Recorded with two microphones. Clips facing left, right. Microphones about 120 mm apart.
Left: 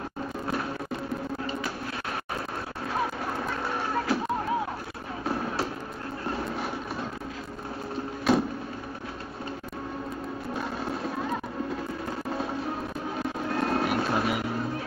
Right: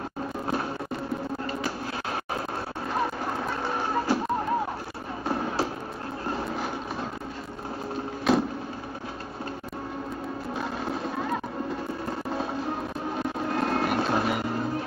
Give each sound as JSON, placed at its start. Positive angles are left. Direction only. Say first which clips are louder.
{"t": 2.9, "sound": "music", "louder": "right 1 dB", "side_deg": 0}
{"t": 3.6, "sound": "music", "louder": "right 2 dB", "side_deg": -30}
{"t": 5.3, "sound": "a sound", "louder": "right 2 dB", "side_deg": -30}
{"t": 6.3, "sound": "a sound", "louder": "right 1 dB", "side_deg": 0}
{"t": 8.3, "sound": "vehicle", "louder": "right 1 dB", "side_deg": 0}
{"t": 10.5, "sound": "music", "louder": "right 1 dB", "side_deg": 0}
{"t": 13.1, "sound": "music", "louder": "right 2 dB", "side_deg": 0}